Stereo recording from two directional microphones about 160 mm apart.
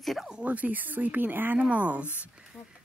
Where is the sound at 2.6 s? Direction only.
15° left (ahead or behind).